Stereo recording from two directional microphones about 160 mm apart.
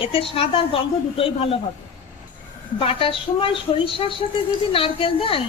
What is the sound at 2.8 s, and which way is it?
A woman's voice, 35° left (ahead or behind).